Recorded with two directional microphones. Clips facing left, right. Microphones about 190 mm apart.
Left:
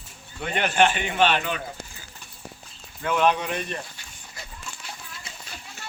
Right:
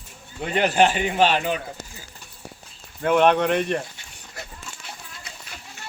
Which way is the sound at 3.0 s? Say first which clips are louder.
Right 5 dB; 60° right (ahead or behind).